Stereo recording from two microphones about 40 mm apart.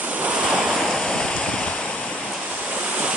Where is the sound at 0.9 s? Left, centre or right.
Centre.